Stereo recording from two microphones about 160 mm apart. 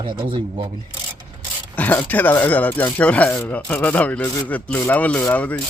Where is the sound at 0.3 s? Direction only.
35° right (ahead or behind).